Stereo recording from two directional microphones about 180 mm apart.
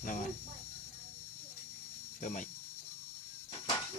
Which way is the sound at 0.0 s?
50° left (ahead or behind).